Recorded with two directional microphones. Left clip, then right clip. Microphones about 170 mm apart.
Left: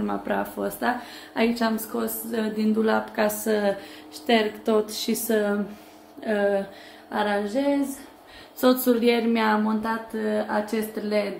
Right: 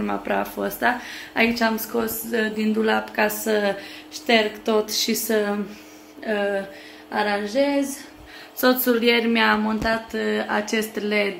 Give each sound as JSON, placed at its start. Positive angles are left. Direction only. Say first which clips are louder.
{"t": 0.0, "sound": "speech", "louder": "right 3 dB", "side_deg": 0}
{"t": 6.2, "sound": "a sound", "louder": "even", "side_deg": 15}
{"t": 8.8, "sound": "speech", "louder": "right 2 dB", "side_deg": 10}
{"t": 10.1, "sound": "a woman's voice", "louder": "right 2 dB", "side_deg": -10}